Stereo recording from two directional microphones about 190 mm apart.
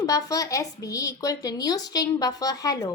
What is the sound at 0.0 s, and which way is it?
A woman's voice, 20° left (ahead or behind).